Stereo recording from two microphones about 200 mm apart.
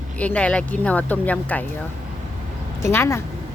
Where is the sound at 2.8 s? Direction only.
15° left (ahead or behind).